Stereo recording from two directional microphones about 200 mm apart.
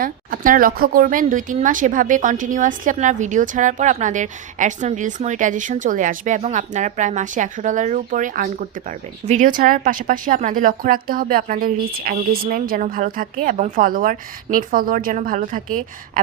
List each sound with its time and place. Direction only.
0.0 s a woman's voice: 45° right (ahead or behind)